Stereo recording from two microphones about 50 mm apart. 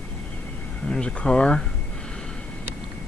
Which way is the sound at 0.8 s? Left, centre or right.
Centre.